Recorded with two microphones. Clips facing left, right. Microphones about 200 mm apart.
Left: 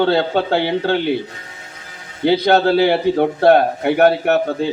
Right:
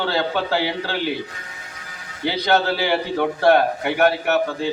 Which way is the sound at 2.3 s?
55° left (ahead or behind).